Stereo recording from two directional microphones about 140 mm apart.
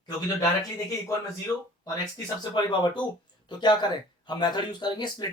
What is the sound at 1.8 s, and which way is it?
Speech, 30° left (ahead or behind).